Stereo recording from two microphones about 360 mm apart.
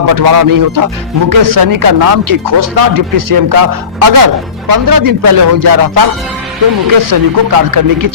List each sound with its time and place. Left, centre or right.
0.0 s speech: right